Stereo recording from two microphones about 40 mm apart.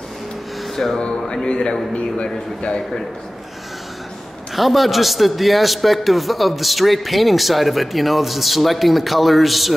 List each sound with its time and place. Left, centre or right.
0.9 s speech: centre
4.6 s a man's voice: centre